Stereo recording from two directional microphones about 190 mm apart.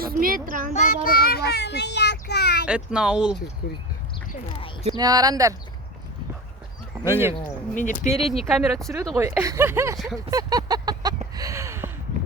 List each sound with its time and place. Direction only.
0.0 s speech: 50° right (ahead or behind)
0.7 s a child's voice: 40° left (ahead or behind); by 2.6 s 60° left (ahead or behind)
2.6 s a child's voice: 5° right (ahead or behind)
4.9 s speech: 20° right (ahead or behind)
7.0 s speech: 10° right (ahead or behind)
7.8 s speech: 40° left (ahead or behind)
8.1 s a child's voice: centre (ahead or behind)
9.1 s speech: 15° right (ahead or behind)
10.2 s vehicle: 20° right (ahead or behind)
11.3 s a sound: 15° right (ahead or behind)